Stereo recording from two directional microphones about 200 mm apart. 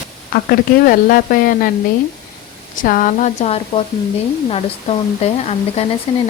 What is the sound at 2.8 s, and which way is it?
Speech, 40° left (ahead or behind).